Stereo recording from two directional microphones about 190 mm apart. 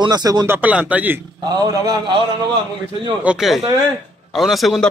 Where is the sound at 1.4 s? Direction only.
20° right (ahead or behind).